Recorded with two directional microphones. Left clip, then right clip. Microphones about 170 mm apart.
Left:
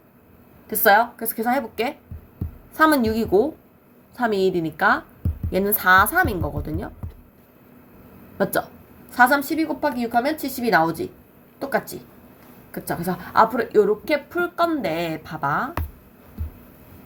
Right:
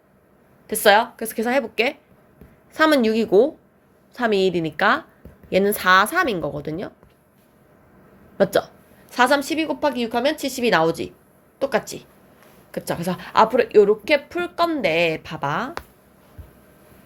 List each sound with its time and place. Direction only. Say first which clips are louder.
0.7 s a woman's voice: right 1 dB; 45° right (ahead or behind)
9.1 s a woman's voice: left 1 dB; 40° right (ahead or behind)